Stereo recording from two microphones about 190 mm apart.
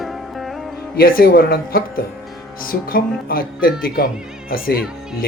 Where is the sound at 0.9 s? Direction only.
50° left (ahead or behind).